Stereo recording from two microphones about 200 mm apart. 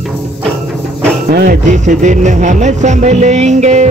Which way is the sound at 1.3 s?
45° right (ahead or behind).